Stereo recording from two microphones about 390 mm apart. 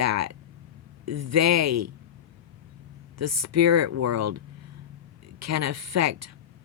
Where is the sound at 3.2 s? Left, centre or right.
Right.